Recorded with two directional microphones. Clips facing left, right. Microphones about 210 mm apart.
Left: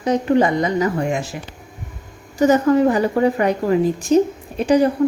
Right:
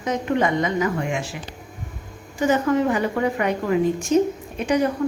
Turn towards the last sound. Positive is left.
turn(degrees=35)  # may be behind; listen again after turning